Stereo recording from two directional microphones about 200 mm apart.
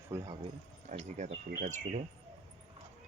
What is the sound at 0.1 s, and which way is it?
Speech, 15° right (ahead or behind).